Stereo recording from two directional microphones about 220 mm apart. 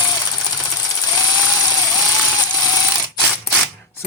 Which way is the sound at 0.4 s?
15° left (ahead or behind).